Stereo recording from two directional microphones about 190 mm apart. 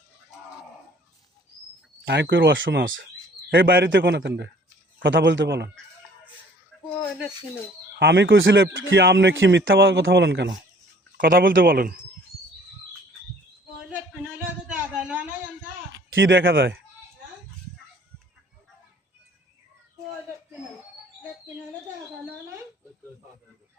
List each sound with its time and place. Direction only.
2.0 s a man's voice: 65° right (ahead or behind); by 3.0 s 85° right
3.5 s a man's voice: 70° right (ahead or behind)
7.9 s a man's voice: 65° right (ahead or behind)
11.2 s a man's voice: 50° right (ahead or behind)
13.8 s a sound: 10° right (ahead or behind)
16.1 s speech: 85° right